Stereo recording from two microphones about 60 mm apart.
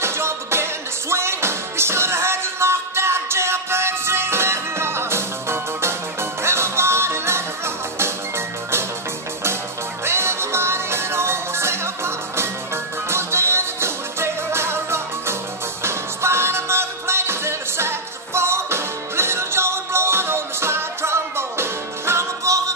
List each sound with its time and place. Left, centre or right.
0.0 s music: right
10.0 s music: right